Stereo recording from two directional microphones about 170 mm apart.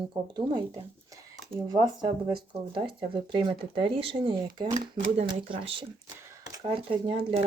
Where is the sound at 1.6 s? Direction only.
25° right (ahead or behind).